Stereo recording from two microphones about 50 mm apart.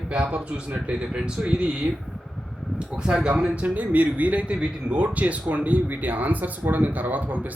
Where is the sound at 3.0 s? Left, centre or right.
Centre.